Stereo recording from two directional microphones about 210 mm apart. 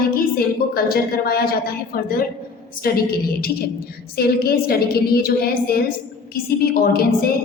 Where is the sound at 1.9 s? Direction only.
45° left (ahead or behind).